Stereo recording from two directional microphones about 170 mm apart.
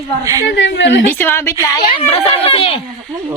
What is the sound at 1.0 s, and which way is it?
Speech, 10° left (ahead or behind).